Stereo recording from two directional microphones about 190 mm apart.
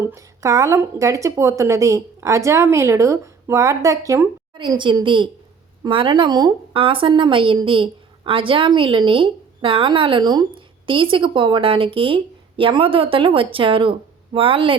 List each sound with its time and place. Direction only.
0.1 s a woman's voice: 15° right (ahead or behind)